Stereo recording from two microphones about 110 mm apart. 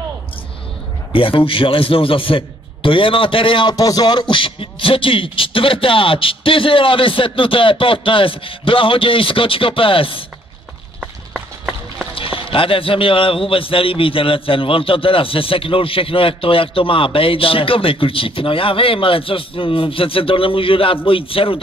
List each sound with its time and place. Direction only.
1.1 s speech: 55° left (ahead or behind)
3.7 s speech: 35° left (ahead or behind); by 10.2 s 55° left (ahead or behind)
11.0 s run: 10° right (ahead or behind)
12.2 s a man's voice: 55° left (ahead or behind)